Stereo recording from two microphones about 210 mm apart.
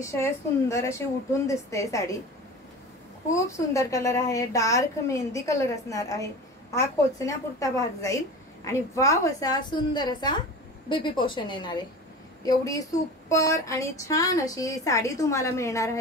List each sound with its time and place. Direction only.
0.0 s a woman's voice: 15° left (ahead or behind)
3.3 s a woman's voice: 15° left (ahead or behind)